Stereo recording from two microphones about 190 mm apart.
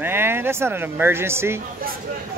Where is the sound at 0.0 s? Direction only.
10° right (ahead or behind).